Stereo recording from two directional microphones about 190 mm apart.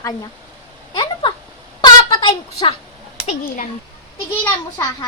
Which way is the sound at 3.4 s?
45° left (ahead or behind).